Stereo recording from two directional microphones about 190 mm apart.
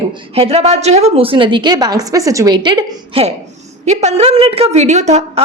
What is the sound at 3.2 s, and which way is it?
A woman's voice, 30° right (ahead or behind).